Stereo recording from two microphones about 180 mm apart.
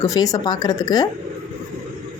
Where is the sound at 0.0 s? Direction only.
20° left (ahead or behind).